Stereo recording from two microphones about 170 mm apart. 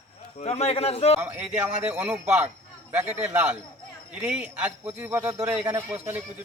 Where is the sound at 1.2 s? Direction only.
10° right (ahead or behind).